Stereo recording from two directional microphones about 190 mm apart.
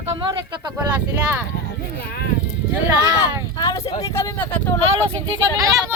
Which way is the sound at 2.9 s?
15° right (ahead or behind).